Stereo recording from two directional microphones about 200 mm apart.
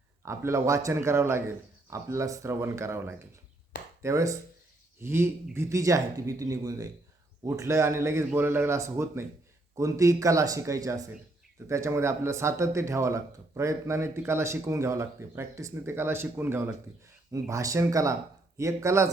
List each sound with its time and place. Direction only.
0.2 s speech: 15° right (ahead or behind)